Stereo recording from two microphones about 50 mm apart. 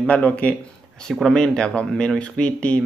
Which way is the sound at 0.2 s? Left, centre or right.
Left.